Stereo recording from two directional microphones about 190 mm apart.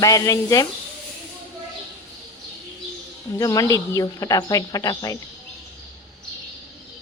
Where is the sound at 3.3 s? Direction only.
20° left (ahead or behind).